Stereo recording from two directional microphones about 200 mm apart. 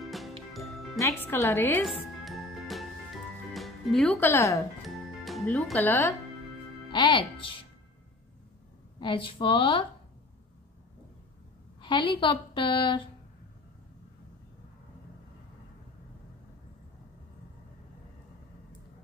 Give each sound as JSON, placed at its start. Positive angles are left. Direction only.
{"t": 0.0, "sound": "music", "side_deg": 0}
{"t": 0.9, "sound": "a woman's voice", "side_deg": 15}
{"t": 2.2, "sound": "music", "side_deg": 0}
{"t": 3.5, "sound": "speech", "side_deg": 0}
{"t": 4.8, "sound": "music", "side_deg": 0}
{"t": 6.9, "sound": "speech", "side_deg": 25}
{"t": 9.0, "sound": "a woman's voice", "side_deg": 25}
{"t": 11.8, "sound": "a woman's voice", "side_deg": 25}